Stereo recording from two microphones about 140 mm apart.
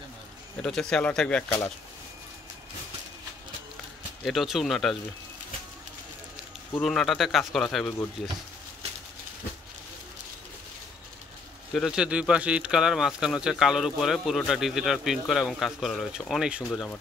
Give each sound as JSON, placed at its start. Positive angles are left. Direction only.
{"t": 0.6, "sound": "speech", "side_deg": 5}
{"t": 4.2, "sound": "speech", "side_deg": 0}
{"t": 6.8, "sound": "speech", "side_deg": 5}
{"t": 11.7, "sound": "speech", "side_deg": -5}